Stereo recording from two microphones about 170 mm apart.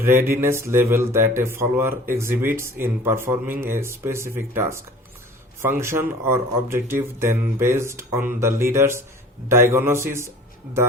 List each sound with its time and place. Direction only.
0.3 s speech: 15° right (ahead or behind)